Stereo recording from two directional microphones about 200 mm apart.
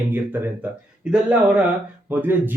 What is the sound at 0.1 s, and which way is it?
Speech, 10° right (ahead or behind).